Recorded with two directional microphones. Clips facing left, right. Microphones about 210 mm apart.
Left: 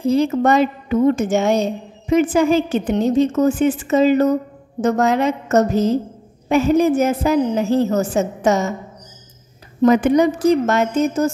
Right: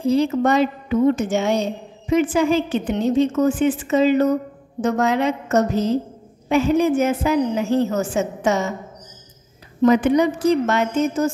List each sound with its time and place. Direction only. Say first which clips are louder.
0.0 s a woman's voice: left 2 dB; 45° left (ahead or behind)
9.8 s a woman's voice: left 2 dB; 45° left (ahead or behind)